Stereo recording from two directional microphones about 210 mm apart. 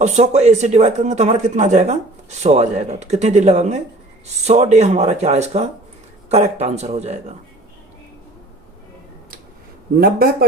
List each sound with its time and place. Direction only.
0.0 s a man's voice: 30° right (ahead or behind)